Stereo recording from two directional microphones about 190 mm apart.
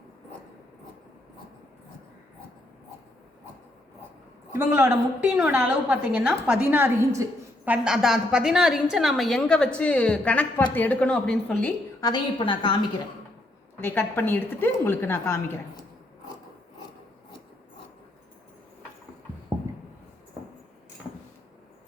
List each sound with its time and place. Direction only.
4.5 s a woman's voice: 10° right (ahead or behind); by 11.7 s 5° left (ahead or behind)
11.9 s a woman's voice: 20° left (ahead or behind)
13.8 s a woman's voice: 10° left (ahead or behind)